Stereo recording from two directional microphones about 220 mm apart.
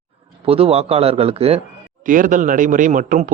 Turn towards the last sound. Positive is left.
turn(degrees=-35)  # may be behind; listen again after turning